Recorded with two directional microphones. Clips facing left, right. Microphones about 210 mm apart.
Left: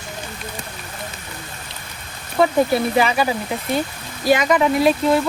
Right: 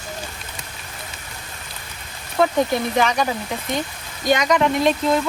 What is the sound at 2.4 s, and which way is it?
Speech, 5° left (ahead or behind).